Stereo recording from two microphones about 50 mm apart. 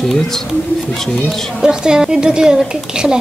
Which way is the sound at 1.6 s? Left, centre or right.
Centre.